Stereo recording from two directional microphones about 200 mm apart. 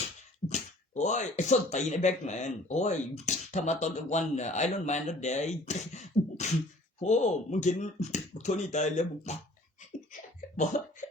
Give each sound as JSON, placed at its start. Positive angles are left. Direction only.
{"t": 0.4, "sound": "speech", "side_deg": 35}
{"t": 10.8, "sound": "speech", "side_deg": 35}